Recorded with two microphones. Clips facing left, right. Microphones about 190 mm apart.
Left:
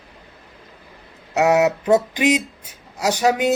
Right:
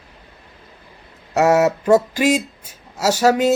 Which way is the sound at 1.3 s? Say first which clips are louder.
Right 1 dB; 15° left (ahead or behind).